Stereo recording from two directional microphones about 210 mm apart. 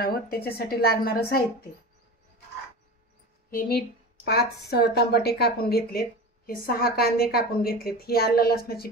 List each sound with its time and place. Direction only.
0.0 s a woman's voice: 45° left (ahead or behind)
3.4 s a woman's voice: 45° left (ahead or behind)